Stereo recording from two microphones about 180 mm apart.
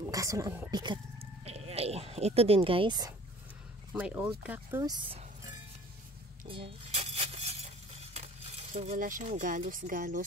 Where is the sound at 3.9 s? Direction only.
10° right (ahead or behind); by 5.5 s 25° right (ahead or behind).